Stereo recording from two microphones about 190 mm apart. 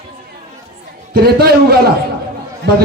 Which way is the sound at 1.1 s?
55° right (ahead or behind).